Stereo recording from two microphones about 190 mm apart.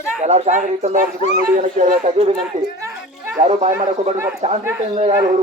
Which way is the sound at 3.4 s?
35° right (ahead or behind).